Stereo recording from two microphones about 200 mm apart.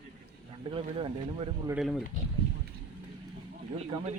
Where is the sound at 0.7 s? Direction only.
25° right (ahead or behind).